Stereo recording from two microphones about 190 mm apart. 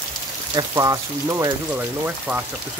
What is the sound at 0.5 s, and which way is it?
Speech, 15° right (ahead or behind).